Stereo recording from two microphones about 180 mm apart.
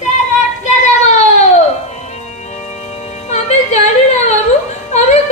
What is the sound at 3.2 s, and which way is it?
Music, 40° left (ahead or behind).